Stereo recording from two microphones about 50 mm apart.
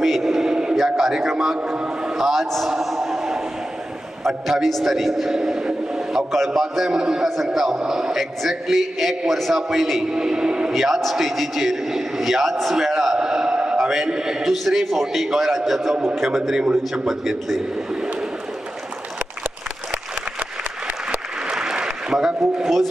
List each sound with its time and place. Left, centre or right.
0.0 s a sound: centre
0.8 s a man's voice: centre
1.6 s a man's voice: centre
2.1 s a man's voice: centre
2.7 s a sound: centre
4.2 s a man's voice: centre
5.4 s a sound: centre
6.1 s a man's voice: centre
10.1 s speech: centre
10.7 s a man's voice: centre
14.4 s a man's voice: centre
20.3 s applause: right
21.5 s applause: centre